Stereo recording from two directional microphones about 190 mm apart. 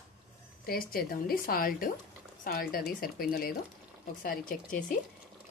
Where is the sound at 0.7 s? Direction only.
50° left (ahead or behind).